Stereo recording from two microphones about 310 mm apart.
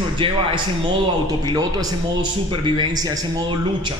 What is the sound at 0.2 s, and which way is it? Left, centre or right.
Speech, centre.